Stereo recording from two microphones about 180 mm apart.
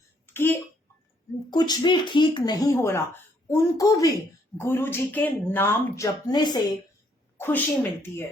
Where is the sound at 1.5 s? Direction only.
25° left (ahead or behind).